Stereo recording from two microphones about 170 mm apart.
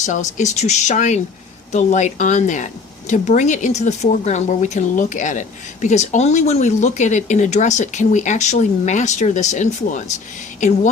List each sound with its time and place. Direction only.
0.0 s a woman's voice: 45° left (ahead or behind)